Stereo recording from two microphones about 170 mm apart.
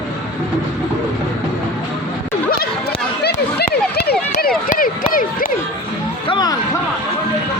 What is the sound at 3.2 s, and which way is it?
Run, 70° left (ahead or behind).